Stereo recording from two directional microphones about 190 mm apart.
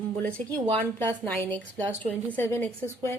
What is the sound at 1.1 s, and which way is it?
Speech, 10° left (ahead or behind).